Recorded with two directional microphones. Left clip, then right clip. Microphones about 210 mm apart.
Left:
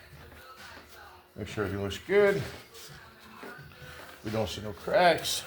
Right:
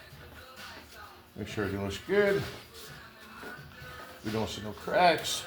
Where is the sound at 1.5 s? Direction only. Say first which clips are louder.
Left 1 dB; 35° left (ahead or behind).